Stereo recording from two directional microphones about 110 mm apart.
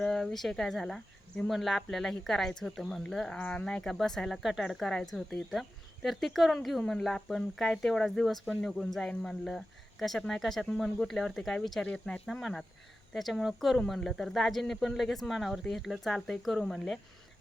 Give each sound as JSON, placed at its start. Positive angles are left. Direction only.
{"t": 0.0, "sound": "speech", "side_deg": 5}